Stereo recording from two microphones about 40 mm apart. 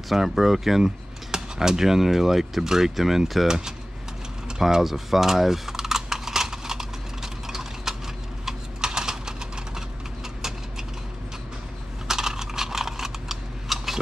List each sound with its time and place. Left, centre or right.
0.1 s speech: centre
4.5 s typing: centre
12.1 s a sound: centre